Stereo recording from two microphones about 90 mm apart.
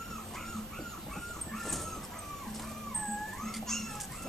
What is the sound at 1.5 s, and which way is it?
Dog, centre (ahead or behind).